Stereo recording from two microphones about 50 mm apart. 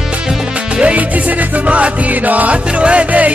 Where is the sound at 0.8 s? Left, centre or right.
Right.